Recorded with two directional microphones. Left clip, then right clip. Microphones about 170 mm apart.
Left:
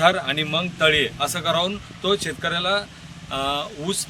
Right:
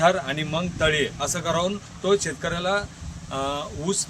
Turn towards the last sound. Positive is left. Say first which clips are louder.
# left 2 dB
turn(degrees=-15)  # may be behind; listen again after turning